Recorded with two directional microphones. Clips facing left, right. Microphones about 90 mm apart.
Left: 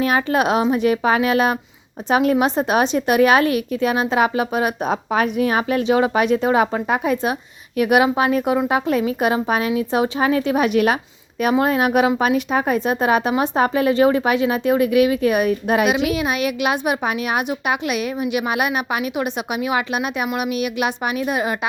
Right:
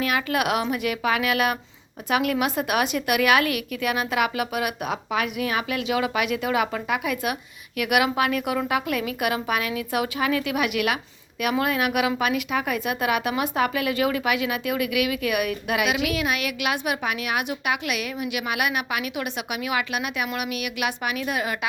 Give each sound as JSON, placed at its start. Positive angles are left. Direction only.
{"t": 0.0, "sound": "a woman's voice", "side_deg": 35}